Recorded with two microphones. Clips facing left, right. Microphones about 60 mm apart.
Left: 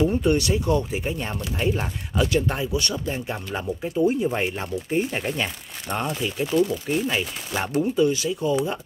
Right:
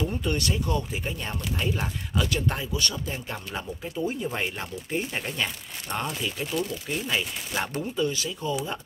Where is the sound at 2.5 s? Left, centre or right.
Centre.